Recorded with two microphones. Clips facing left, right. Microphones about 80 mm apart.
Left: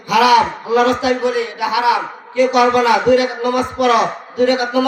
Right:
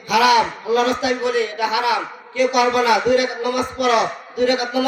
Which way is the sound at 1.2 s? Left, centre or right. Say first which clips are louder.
Left 2 dB; centre.